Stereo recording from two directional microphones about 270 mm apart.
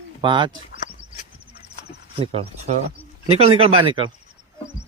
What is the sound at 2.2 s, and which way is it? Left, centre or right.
Speech, right.